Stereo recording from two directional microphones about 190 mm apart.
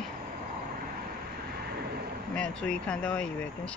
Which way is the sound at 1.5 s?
55° right (ahead or behind).